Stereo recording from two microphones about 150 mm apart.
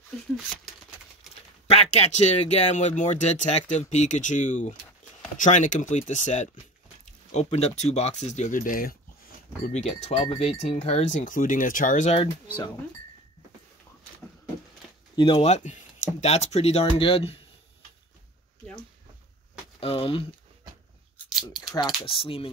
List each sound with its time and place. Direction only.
1.7 s speech: 45° left (ahead or behind); by 8.9 s 65° left (ahead or behind)
9.7 s speech: 50° left (ahead or behind)
12.2 s speech: 35° left (ahead or behind)
15.1 s speech: 30° left (ahead or behind)
15.4 s speech: 50° left (ahead or behind)
19.8 s speech: 35° left (ahead or behind)
21.7 s speech: 30° left (ahead or behind)